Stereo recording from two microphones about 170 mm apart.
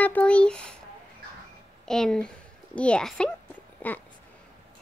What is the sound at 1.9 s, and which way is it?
A woman's voice, 5° left (ahead or behind).